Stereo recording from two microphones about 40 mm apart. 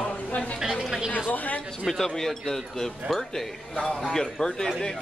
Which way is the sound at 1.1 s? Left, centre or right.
Left.